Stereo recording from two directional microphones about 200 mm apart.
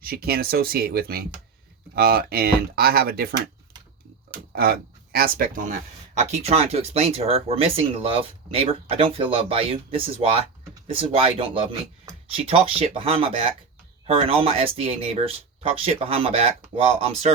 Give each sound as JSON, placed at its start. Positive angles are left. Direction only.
{"t": 0.0, "sound": "speech", "side_deg": -50}
{"t": 4.5, "sound": "speech", "side_deg": -50}